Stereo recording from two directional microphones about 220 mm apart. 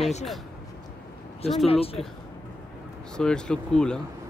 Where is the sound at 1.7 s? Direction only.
25° left (ahead or behind).